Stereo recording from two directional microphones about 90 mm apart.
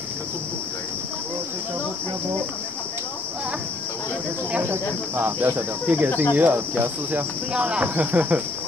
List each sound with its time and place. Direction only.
4.6 s cricket: 20° right (ahead or behind)